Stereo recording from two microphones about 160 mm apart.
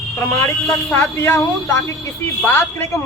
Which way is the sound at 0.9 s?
15° left (ahead or behind).